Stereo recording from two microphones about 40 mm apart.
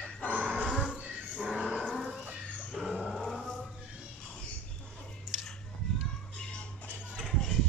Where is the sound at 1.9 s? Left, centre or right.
Centre.